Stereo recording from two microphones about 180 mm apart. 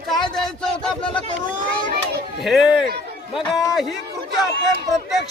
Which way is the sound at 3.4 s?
25° left (ahead or behind).